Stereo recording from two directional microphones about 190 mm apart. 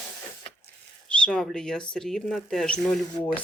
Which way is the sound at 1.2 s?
5° left (ahead or behind).